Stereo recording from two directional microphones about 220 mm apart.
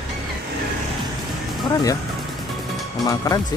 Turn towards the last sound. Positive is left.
turn(degrees=15)  # may be behind; listen again after turning